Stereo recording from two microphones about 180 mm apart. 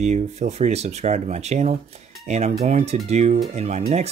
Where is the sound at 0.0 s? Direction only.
40° right (ahead or behind).